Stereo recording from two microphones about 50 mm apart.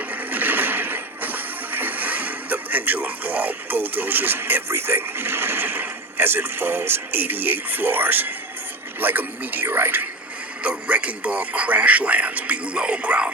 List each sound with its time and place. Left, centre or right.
0.1 s music: right
9.0 s a man's voice: right
10.6 s speech: right